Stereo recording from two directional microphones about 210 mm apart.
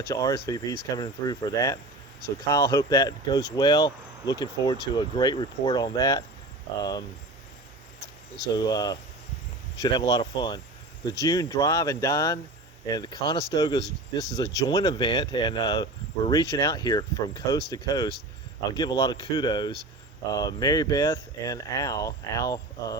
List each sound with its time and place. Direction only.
0.1 s speech: 15° left (ahead or behind)
8.5 s speech: 20° left (ahead or behind)